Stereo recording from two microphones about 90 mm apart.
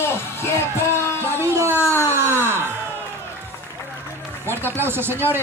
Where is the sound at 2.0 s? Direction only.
25° right (ahead or behind).